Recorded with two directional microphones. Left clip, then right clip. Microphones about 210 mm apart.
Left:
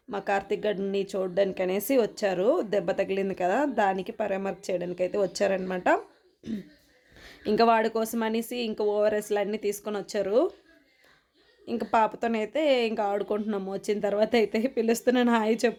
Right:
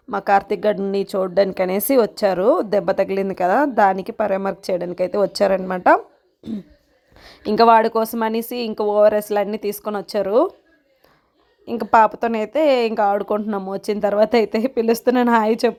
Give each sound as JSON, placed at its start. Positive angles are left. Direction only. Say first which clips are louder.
{"t": 0.1, "sound": "speech", "louder": "right 10 dB", "side_deg": -25}
{"t": 11.6, "sound": "speech", "louder": "right 10 dB", "side_deg": -25}